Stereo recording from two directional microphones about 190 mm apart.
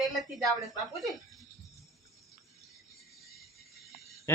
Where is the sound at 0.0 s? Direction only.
Centre (ahead or behind).